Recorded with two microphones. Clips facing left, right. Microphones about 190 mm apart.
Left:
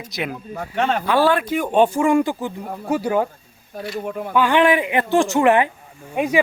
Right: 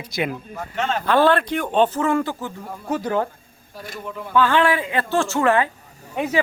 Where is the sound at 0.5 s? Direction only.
60° left (ahead or behind).